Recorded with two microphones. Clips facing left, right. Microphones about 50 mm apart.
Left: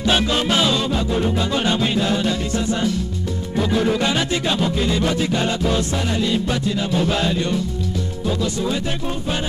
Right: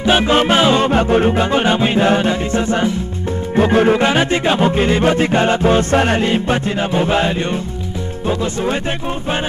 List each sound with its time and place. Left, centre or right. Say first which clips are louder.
0.0 s music: right 6 dB; right
0.8 s music: right 7 dB; right
3.5 s music: right 7 dB; right